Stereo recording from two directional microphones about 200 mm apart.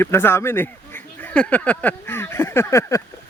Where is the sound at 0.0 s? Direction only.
10° left (ahead or behind).